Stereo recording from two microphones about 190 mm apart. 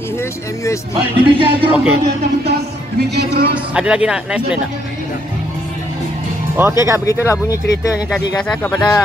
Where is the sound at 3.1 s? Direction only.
60° right (ahead or behind).